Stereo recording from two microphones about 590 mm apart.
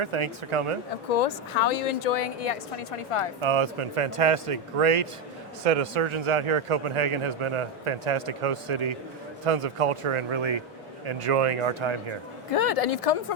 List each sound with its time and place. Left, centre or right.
0.0 s a man's voice: right
1.1 s a woman's voice: left
3.4 s a man's voice: right
12.5 s speech: left